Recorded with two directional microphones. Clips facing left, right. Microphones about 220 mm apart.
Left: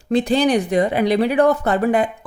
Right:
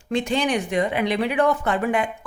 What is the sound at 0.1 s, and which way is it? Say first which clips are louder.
Speech: left 6 dB; 35° left (ahead or behind).